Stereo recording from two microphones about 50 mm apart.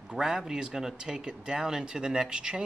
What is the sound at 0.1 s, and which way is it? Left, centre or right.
Speech, centre.